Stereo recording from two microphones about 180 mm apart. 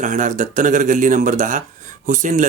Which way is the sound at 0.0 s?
45° right (ahead or behind).